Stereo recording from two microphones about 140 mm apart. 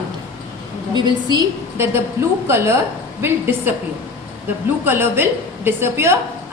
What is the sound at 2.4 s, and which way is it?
Speech, 20° right (ahead or behind).